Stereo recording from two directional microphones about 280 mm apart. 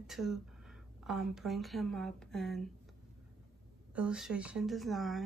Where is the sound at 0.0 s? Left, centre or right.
Centre.